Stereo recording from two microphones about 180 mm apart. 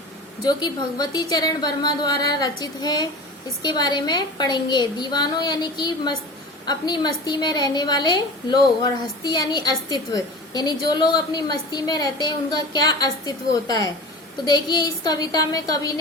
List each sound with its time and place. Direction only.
0.4 s a woman's voice: 25° left (ahead or behind)